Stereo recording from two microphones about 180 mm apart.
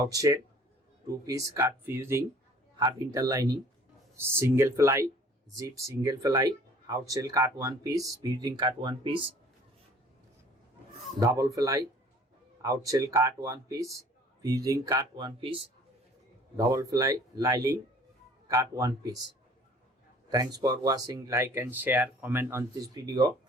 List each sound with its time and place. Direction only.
0.0 s speech: 20° right (ahead or behind)
11.2 s speech: 20° right (ahead or behind)
16.6 s speech: 20° right (ahead or behind)
20.3 s speech: 20° right (ahead or behind)